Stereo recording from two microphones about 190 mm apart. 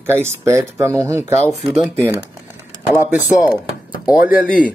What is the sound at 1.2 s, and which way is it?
Speech, 35° left (ahead or behind).